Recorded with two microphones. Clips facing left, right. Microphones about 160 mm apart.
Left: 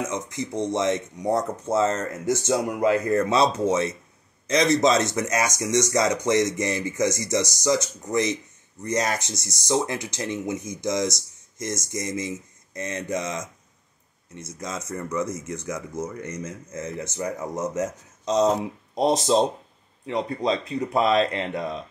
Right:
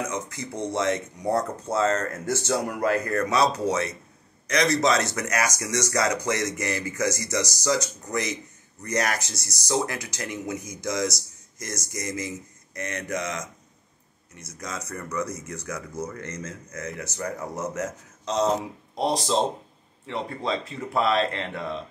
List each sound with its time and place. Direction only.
0.0 s speech: 20° left (ahead or behind)
16.7 s speech: 25° left (ahead or behind)